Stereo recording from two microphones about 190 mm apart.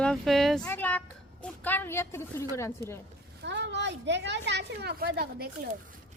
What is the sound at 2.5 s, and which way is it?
Speech, 15° left (ahead or behind).